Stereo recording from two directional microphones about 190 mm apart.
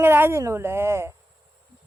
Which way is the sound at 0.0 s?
10° right (ahead or behind).